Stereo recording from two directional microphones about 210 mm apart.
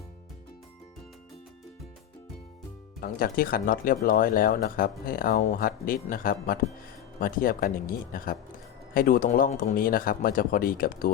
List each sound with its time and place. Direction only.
3.0 s speech: 45° left (ahead or behind)